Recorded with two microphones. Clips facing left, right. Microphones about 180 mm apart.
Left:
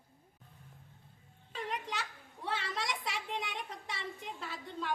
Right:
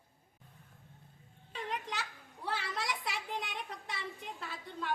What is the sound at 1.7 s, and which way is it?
A woman's voice, centre (ahead or behind).